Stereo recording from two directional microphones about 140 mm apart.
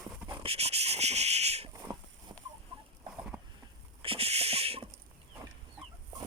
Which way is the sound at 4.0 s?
45° right (ahead or behind).